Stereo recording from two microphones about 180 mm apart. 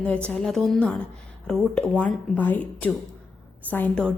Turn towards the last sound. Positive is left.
turn(degrees=5)  # may be behind; listen again after turning